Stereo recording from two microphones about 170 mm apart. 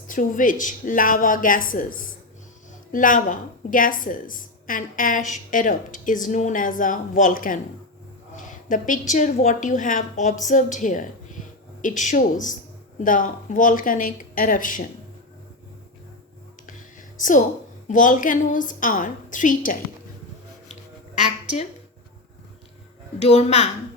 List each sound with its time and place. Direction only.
0.1 s a woman's voice: 50° left (ahead or behind)
17.8 s a woman's voice: 50° left (ahead or behind)
21.2 s a woman's voice: 40° left (ahead or behind)
23.2 s a child's voice: 40° left (ahead or behind)